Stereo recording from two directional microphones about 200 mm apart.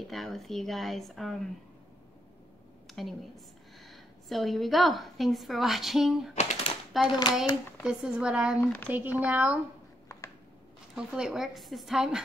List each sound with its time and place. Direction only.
0.1 s speech: centre (ahead or behind)
2.9 s a woman's voice: centre (ahead or behind)
6.3 s typewriter: 35° left (ahead or behind)
6.9 s speech: centre (ahead or behind)
11.0 s speech: 5° right (ahead or behind)